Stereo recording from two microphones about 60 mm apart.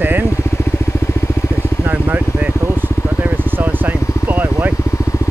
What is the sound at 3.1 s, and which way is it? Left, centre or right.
Vehicle, right.